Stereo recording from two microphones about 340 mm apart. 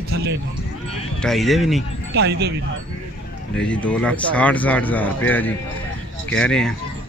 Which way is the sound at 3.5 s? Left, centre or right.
Centre.